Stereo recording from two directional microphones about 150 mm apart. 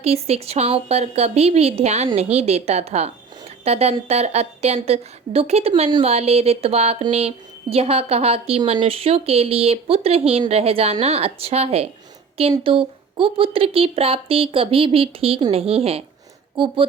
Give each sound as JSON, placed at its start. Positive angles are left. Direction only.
{"t": 0.0, "sound": "a woman's voice", "side_deg": -45}